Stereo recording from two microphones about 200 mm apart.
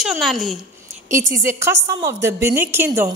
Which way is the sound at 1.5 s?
15° right (ahead or behind).